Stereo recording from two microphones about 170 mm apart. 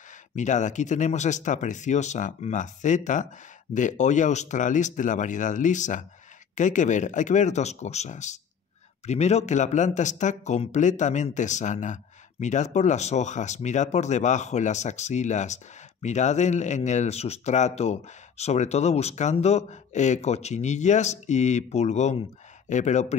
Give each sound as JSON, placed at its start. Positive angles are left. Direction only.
{"t": 0.4, "sound": "speech", "side_deg": 45}